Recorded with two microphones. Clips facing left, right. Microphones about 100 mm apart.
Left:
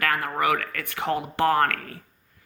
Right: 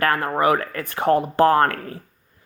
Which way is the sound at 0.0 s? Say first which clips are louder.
Right 5 dB; 35° right (ahead or behind).